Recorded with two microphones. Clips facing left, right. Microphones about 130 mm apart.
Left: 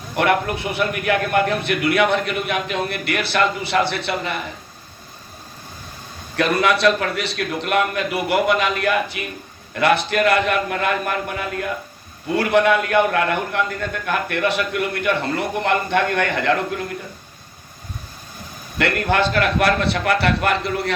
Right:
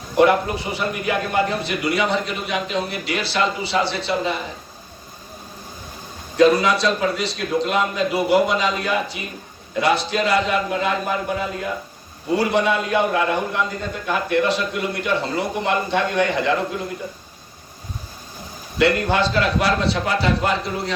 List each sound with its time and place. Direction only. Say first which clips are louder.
0.2 s a man's voice: right 3 dB; 60° left (ahead or behind)
6.3 s a man's voice: right 3 dB; 65° left (ahead or behind)
18.8 s a man's voice: right 1 dB; 55° left (ahead or behind)